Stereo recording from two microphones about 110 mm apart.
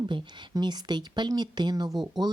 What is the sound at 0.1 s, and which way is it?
A woman's voice, 45° right (ahead or behind).